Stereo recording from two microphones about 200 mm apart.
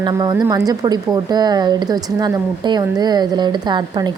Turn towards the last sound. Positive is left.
turn(degrees=-20)  # may be behind; listen again after turning